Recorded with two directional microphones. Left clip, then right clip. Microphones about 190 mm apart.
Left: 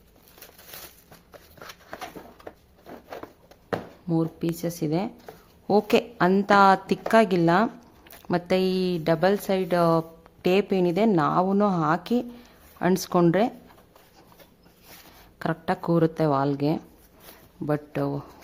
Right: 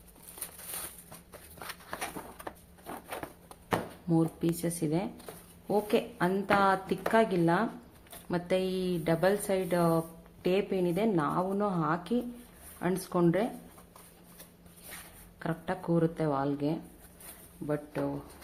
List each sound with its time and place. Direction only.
1.6 s a sound: centre (ahead or behind)
4.1 s a woman's voice: 25° left (ahead or behind); by 13.5 s 40° left (ahead or behind)
15.4 s a woman's voice: 40° left (ahead or behind)